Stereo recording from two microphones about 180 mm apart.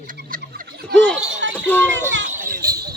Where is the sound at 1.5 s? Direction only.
10° left (ahead or behind).